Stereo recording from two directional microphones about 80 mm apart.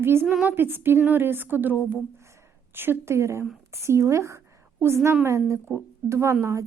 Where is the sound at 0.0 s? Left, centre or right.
Right.